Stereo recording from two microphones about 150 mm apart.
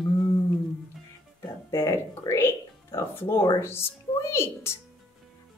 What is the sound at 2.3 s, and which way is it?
A woman's voice, 15° left (ahead or behind).